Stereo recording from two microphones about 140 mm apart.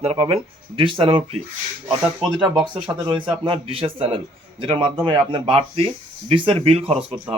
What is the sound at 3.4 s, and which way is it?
Speech, 40° right (ahead or behind).